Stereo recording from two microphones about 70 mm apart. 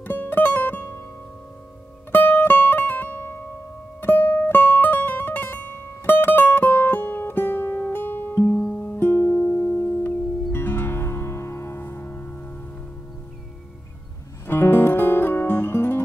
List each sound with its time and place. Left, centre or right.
0.0 s music: left
2.1 s music: left
14.5 s music: left